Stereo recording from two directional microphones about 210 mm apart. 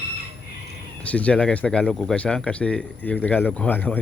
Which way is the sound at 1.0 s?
5° left (ahead or behind).